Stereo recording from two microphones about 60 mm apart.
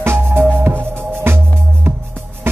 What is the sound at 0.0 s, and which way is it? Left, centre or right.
Music, right.